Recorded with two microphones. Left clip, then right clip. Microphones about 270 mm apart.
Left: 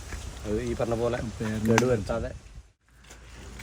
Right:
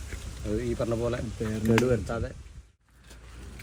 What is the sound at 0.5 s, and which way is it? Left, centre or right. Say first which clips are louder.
Speech: left 1 dB; centre.